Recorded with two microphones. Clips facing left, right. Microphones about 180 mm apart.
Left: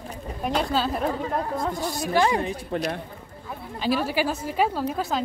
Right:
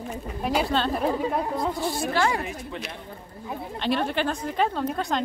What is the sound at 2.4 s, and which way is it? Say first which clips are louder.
Speech: left 7 dB; 40° left (ahead or behind).